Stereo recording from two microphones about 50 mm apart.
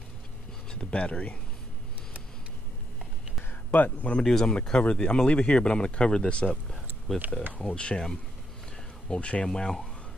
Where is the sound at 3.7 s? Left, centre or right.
Left.